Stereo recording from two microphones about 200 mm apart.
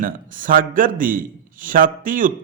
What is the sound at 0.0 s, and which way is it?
A man's voice, 45° right (ahead or behind).